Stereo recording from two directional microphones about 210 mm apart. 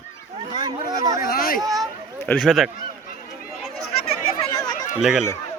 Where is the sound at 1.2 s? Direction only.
45° left (ahead or behind).